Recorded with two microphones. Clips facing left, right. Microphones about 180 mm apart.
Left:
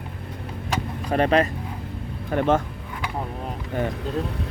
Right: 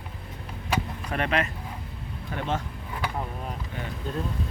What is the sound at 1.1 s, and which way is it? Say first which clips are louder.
Speech: left 8 dB; 35° left (ahead or behind).